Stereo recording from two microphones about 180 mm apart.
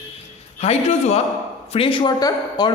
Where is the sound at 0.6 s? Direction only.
35° left (ahead or behind).